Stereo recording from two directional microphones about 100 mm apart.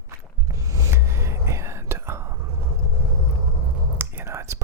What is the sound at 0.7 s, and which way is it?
Whispering, 30° right (ahead or behind).